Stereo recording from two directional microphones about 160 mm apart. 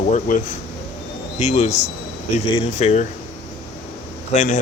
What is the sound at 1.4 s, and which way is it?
Speech, 45° left (ahead or behind).